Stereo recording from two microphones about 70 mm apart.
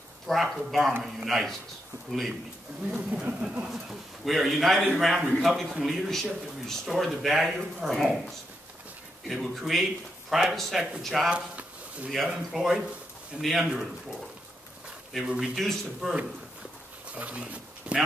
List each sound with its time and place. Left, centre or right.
0.3 s a man's voice: centre
3.7 s a man's voice: centre
11.2 s a sound: centre
12.1 s a man's voice: centre
15.2 s a man's voice: centre
17.1 s speech: centre